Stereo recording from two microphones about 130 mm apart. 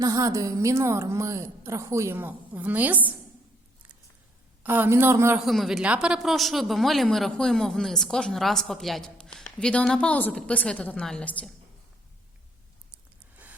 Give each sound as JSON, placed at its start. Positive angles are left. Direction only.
{"t": 0.0, "sound": "a woman's voice", "side_deg": -25}
{"t": 4.6, "sound": "a man's voice", "side_deg": -15}
{"t": 5.4, "sound": "speech", "side_deg": 0}
{"t": 12.9, "sound": "a sound", "side_deg": -10}